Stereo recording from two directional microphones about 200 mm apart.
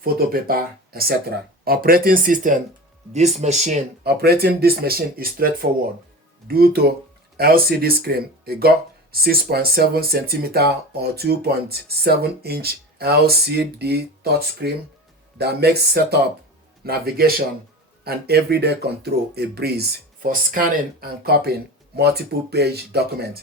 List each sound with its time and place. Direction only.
0.0 s speech: 45° right (ahead or behind)
4.0 s speech: 50° right (ahead or behind)